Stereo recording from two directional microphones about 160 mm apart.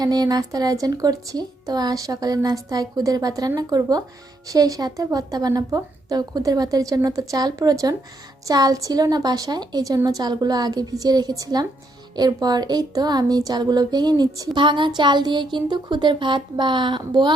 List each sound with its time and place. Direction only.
0.0 s speech: 25° right (ahead or behind)